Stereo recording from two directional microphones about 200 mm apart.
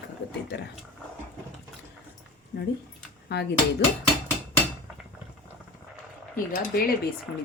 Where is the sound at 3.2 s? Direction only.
55° left (ahead or behind).